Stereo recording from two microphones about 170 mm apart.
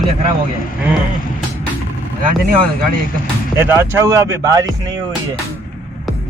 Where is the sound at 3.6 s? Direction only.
15° right (ahead or behind).